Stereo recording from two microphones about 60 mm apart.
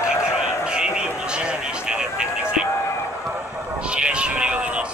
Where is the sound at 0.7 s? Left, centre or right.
Centre.